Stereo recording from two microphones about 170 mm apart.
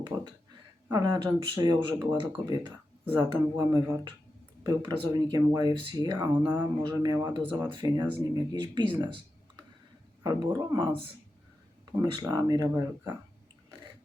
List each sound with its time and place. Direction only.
0.1 s speech: 20° right (ahead or behind)
10.2 s speech: 25° right (ahead or behind)
12.2 s speech: 25° right (ahead or behind)